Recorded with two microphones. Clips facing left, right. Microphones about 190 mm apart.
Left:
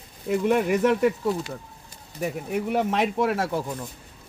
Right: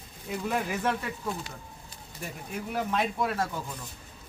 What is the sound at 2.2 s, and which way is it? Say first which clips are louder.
Speech: left 10 dB; 65° left (ahead or behind).